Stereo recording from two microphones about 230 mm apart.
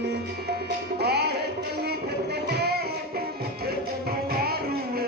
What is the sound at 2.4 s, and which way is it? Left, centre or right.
Music, right.